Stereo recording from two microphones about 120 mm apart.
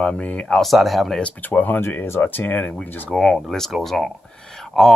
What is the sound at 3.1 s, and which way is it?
Speech, centre (ahead or behind).